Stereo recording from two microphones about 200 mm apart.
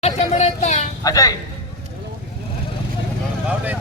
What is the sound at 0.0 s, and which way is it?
Speech, 35° left (ahead or behind).